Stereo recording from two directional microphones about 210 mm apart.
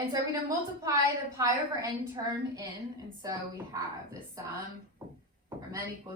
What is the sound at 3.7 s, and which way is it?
Speech, 15° right (ahead or behind).